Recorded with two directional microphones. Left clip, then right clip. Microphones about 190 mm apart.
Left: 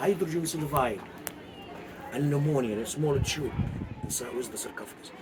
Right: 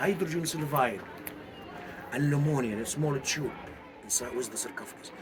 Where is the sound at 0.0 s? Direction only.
35° right (ahead or behind).